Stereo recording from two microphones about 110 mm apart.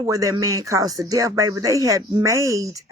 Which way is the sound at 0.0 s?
30° right (ahead or behind).